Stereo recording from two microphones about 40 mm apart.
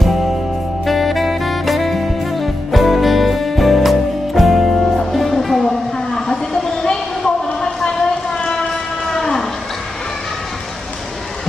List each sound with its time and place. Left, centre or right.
0.0 s music: centre
0.9 s saxophone: centre
4.4 s music: centre
5.6 s a sound: centre
8.4 s train: centre